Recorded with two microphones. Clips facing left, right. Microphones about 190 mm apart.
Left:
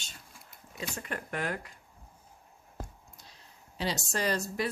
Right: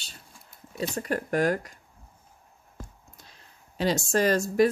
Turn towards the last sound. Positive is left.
turn(degrees=-45)  # may be behind; listen again after turning